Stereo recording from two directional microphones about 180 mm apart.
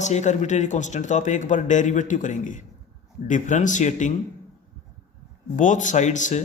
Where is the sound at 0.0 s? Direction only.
40° left (ahead or behind).